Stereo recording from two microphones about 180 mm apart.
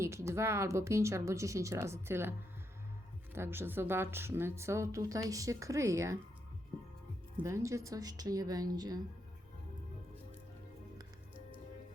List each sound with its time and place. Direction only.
0.0 s a woman's voice: 15° right (ahead or behind)
3.3 s a woman's voice: 15° right (ahead or behind)
7.4 s a woman's voice: 15° right (ahead or behind)